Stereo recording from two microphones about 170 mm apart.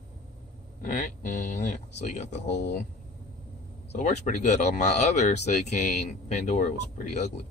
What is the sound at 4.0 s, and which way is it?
Speech, 45° left (ahead or behind).